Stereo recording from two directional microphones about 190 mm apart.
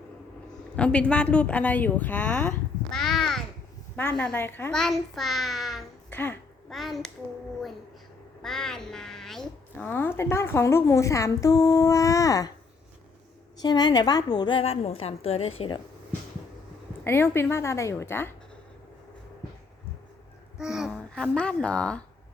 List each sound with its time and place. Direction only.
0.8 s a woman's voice: 5° left (ahead or behind)
6.1 s a woman's voice: 10° left (ahead or behind)
6.7 s a child's voice: centre (ahead or behind)
8.4 s a child's voice: 5° left (ahead or behind); by 12.5 s 20° left (ahead or behind)
13.6 s a woman's voice: 20° left (ahead or behind)
17.0 s a child's voice: 10° left (ahead or behind)
20.6 s a child's voice: 5° right (ahead or behind)